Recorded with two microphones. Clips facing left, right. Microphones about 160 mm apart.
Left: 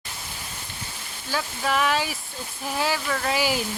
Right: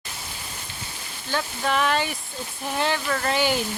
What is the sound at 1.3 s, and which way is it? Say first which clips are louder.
Speech: right 1 dB; 5° left (ahead or behind).